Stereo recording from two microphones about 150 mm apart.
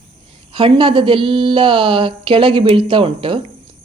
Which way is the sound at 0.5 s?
35° right (ahead or behind).